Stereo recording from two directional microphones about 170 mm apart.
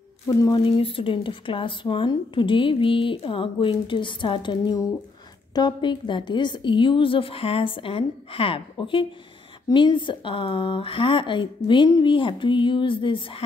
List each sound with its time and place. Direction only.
0.7 s speech: 35° left (ahead or behind)